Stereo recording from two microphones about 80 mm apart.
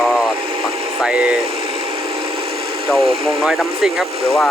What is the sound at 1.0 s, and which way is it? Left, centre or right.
Speech, centre.